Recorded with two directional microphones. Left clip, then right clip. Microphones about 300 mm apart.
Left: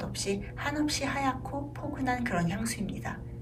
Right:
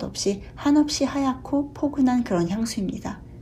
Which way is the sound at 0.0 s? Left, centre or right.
Centre.